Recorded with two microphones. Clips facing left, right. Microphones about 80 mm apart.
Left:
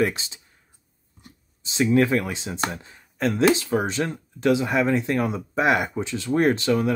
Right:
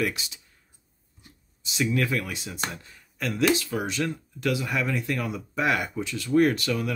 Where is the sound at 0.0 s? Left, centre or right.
Left.